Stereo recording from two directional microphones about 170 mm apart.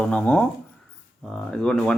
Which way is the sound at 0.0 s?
5° left (ahead or behind).